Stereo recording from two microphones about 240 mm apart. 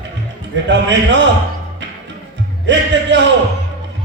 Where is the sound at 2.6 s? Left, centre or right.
Right.